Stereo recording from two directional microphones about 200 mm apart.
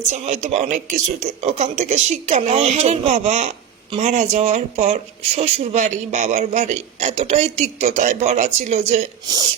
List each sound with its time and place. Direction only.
0.0 s speech: 35° right (ahead or behind)